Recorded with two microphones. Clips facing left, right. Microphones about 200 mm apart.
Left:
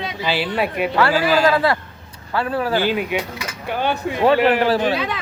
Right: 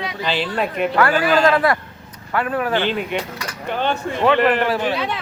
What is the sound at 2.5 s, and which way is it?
Speech, 30° left (ahead or behind).